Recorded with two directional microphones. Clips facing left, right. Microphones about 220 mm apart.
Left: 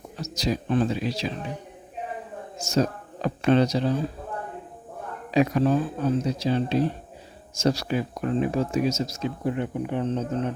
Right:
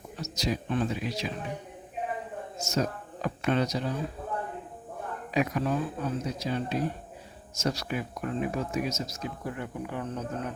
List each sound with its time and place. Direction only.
0.2 s speech: 35° left (ahead or behind)
2.6 s speech: 30° left (ahead or behind)
5.3 s speech: 30° left (ahead or behind)